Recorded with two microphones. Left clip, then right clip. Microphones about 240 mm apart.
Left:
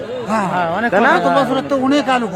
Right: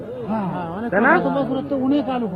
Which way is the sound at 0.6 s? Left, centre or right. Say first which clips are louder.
Left 11 dB; left.